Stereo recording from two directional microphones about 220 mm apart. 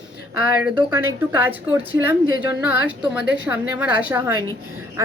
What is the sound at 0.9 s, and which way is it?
A woman's voice, 10° right (ahead or behind).